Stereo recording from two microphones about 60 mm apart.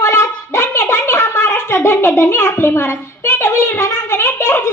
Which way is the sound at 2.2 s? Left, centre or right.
Left.